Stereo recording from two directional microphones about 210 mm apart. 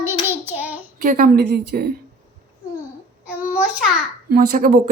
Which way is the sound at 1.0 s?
40° right (ahead or behind).